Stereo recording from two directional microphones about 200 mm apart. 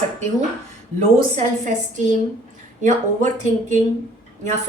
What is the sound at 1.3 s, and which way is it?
A woman's voice, 40° right (ahead or behind).